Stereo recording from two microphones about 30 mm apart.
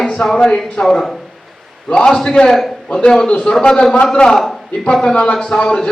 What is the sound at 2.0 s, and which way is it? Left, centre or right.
Speech, centre.